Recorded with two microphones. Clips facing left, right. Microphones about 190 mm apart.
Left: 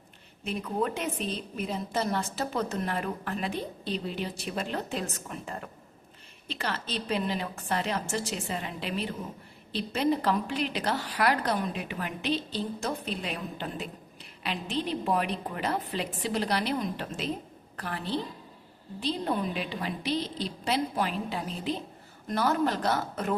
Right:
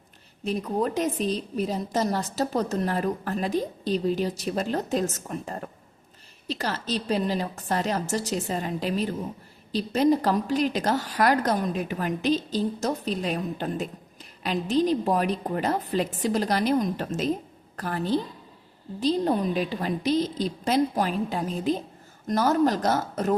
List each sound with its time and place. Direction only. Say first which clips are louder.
0.4 s a woman's voice: right 4 dB; 40° right (ahead or behind)